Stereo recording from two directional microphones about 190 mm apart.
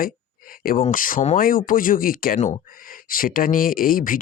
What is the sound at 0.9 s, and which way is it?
Speech, 45° left (ahead or behind).